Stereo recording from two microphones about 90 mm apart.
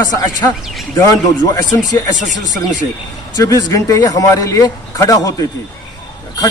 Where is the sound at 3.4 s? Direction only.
45° left (ahead or behind).